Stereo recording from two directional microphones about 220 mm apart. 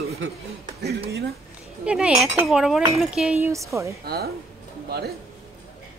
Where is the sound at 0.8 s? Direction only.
45° right (ahead or behind).